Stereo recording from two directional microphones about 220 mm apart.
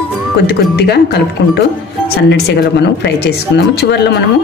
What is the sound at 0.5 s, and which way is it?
Speech, 50° left (ahead or behind).